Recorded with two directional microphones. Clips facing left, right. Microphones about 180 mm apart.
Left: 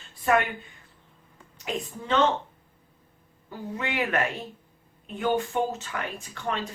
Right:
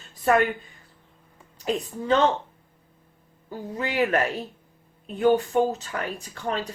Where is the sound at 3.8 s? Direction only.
35° right (ahead or behind).